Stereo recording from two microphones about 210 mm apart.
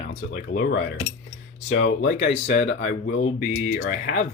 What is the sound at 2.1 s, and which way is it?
Coin, 30° left (ahead or behind).